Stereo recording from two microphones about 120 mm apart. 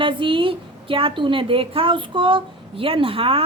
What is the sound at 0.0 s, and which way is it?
A woman's voice, 45° right (ahead or behind).